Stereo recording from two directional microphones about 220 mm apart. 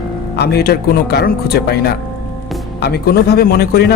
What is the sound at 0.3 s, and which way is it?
A man's voice, 45° left (ahead or behind).